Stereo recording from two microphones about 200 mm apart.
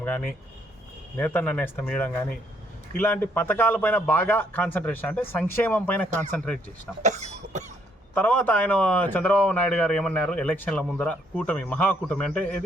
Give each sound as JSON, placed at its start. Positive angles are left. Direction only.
{"t": 1.1, "sound": "speech", "side_deg": 10}
{"t": 7.0, "sound": "cough", "side_deg": -35}
{"t": 8.1, "sound": "speech", "side_deg": 5}